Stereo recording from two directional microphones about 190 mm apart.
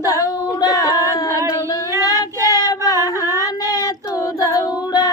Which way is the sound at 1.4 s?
20° left (ahead or behind).